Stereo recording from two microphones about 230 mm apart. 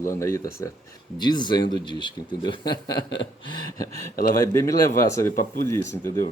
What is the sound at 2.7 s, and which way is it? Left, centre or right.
Speech, left.